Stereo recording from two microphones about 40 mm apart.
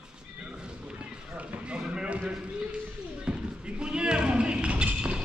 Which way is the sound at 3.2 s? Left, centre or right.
Right.